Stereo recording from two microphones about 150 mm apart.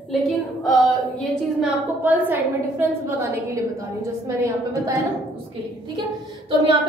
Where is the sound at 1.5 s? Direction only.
10° right (ahead or behind).